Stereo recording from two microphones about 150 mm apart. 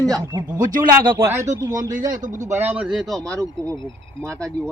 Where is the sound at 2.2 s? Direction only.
55° right (ahead or behind).